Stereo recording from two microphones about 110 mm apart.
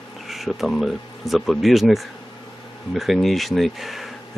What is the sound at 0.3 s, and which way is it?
Speech, centre (ahead or behind).